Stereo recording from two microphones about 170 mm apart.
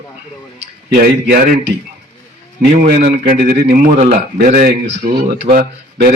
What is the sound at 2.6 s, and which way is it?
Speech, 60° right (ahead or behind).